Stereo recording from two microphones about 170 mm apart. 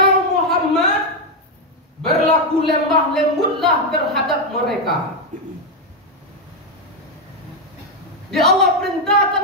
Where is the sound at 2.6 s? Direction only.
Centre (ahead or behind).